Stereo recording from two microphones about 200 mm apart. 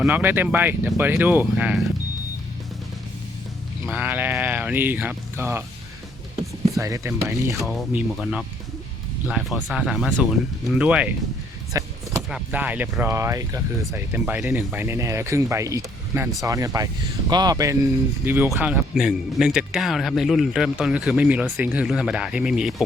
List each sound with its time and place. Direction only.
0.0 s speech: 10° right (ahead or behind)
3.9 s speech: 10° right (ahead or behind)
6.7 s speech: 15° right (ahead or behind)
7.5 s speech: centre (ahead or behind)
11.7 s power windows: 15° right (ahead or behind)
12.3 s speech: 5° right (ahead or behind)